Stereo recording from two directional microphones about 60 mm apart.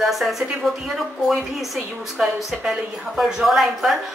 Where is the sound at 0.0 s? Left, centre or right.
Centre.